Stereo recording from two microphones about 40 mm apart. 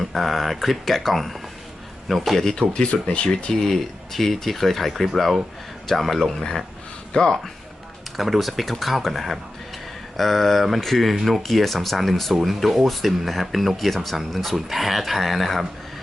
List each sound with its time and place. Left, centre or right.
0.0 s speech: centre
2.4 s speech: centre
7.1 s speech: centre
8.1 s speech: centre